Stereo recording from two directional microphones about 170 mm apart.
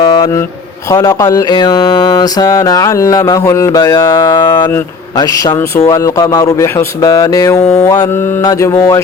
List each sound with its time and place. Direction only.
0.0 s mantra: 25° left (ahead or behind)